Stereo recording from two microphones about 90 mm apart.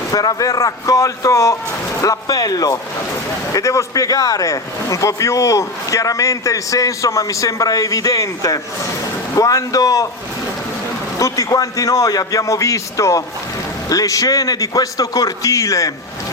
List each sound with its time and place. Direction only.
0.1 s speech: 45° left (ahead or behind)
11.2 s speech: 40° left (ahead or behind)